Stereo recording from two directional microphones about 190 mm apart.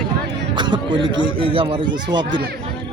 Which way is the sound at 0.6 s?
25° right (ahead or behind).